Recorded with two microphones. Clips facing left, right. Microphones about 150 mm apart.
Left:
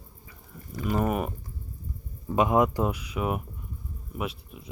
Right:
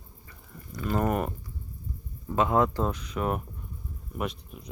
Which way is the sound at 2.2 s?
15° left (ahead or behind).